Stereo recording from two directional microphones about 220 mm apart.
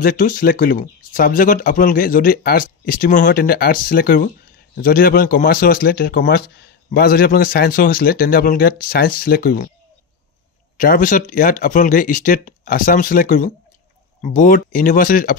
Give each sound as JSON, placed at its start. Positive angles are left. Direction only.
{"t": 0.0, "sound": "speech", "side_deg": 40}
{"t": 10.8, "sound": "speech", "side_deg": 40}